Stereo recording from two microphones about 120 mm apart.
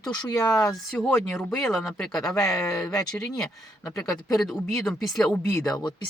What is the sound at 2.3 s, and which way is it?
Speech, 25° left (ahead or behind).